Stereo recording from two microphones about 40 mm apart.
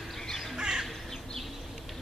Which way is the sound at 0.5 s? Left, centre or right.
Centre.